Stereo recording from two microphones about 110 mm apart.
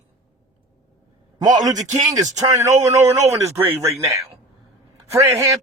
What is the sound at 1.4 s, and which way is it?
Speech, 35° right (ahead or behind).